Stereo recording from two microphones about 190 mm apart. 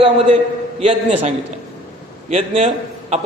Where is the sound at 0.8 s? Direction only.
30° right (ahead or behind).